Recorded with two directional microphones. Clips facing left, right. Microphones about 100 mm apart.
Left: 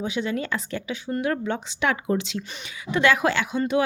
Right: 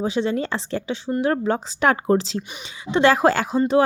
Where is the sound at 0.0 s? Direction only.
35° right (ahead or behind).